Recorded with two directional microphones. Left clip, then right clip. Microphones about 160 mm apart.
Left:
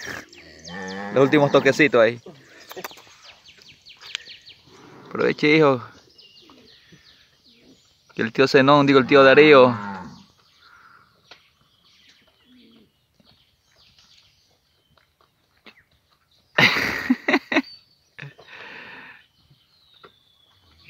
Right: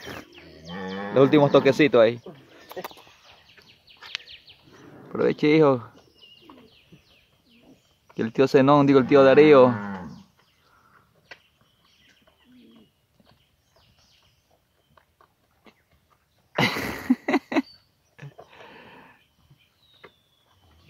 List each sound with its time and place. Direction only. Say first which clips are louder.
0.0 s livestock: left 5 dB; centre (ahead or behind)
0.8 s livestock: even; 50° right (ahead or behind)
1.1 s speech: left 1 dB; centre (ahead or behind)
2.5 s bird: left 1 dB; 5° right (ahead or behind)
4.1 s a sound: left 2 dB; 35° left (ahead or behind)
5.1 s speech: left 2 dB; centre (ahead or behind)
8.1 s speech: left 2 dB; centre (ahead or behind)
15.7 s a sound: left 7 dB; centre (ahead or behind)